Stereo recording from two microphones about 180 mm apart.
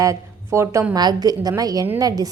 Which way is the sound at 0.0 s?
15° right (ahead or behind).